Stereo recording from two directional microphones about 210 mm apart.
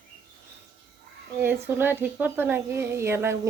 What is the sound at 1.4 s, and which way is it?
A woman's voice, 10° right (ahead or behind).